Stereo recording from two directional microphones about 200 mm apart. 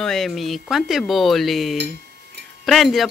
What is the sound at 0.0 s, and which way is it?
Speech, centre (ahead or behind).